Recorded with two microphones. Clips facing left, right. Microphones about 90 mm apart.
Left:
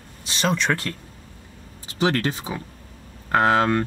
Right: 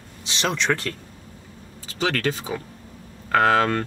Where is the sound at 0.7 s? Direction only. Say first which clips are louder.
Right 1 dB; centre (ahead or behind).